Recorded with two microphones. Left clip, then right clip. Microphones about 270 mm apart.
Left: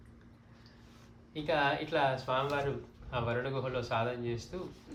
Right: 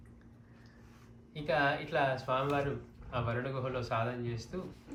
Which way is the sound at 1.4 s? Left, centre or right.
Left.